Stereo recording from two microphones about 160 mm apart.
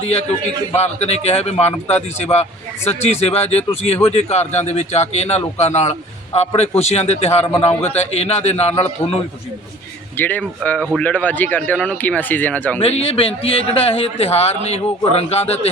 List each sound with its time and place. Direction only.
0.0 s a man's voice: 40° left (ahead or behind)
7.7 s speech: 10° left (ahead or behind)
7.9 s a man's voice: 40° left (ahead or behind)
10.2 s speech: 10° left (ahead or behind)
12.8 s a man's voice: 40° left (ahead or behind)